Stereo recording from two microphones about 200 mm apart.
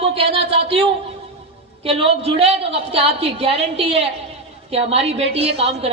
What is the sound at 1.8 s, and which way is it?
A woman's voice, 30° right (ahead or behind).